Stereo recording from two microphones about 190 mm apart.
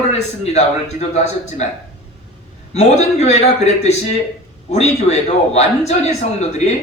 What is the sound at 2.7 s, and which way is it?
A man's voice, 35° left (ahead or behind).